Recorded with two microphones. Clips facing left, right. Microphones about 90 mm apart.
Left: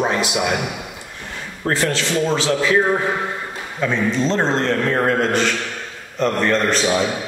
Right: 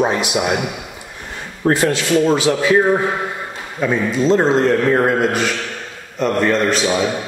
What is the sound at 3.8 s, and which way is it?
A man's voice, 10° right (ahead or behind).